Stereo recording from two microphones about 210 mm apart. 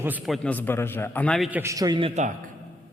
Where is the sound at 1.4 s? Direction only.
10° right (ahead or behind); by 2.3 s 30° right (ahead or behind).